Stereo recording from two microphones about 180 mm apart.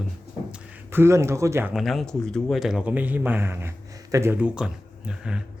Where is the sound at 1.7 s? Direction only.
Centre (ahead or behind).